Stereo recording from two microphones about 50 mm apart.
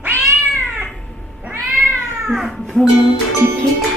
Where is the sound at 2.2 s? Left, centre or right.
Centre.